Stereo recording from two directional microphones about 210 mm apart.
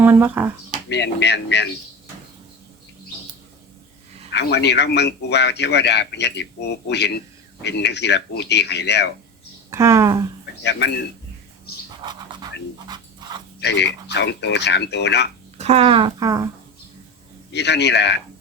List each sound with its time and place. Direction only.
0.0 s speech: 10° right (ahead or behind)
0.9 s speech: 55° left (ahead or behind)
4.3 s a man's voice: 55° left (ahead or behind)
9.6 s speech: 15° right (ahead or behind)
10.6 s speech: 55° left (ahead or behind)
12.0 s speech: 20° right (ahead or behind)
13.2 s dog: 20° right (ahead or behind)
13.6 s speech: 55° left (ahead or behind)
15.5 s speech: 30° right (ahead or behind)
17.5 s speech: 55° left (ahead or behind)